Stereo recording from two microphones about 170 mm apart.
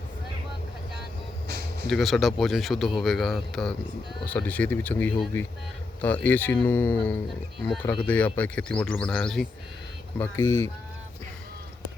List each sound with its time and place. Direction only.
1.9 s speech: centre (ahead or behind)
10.2 s speech: 15° left (ahead or behind)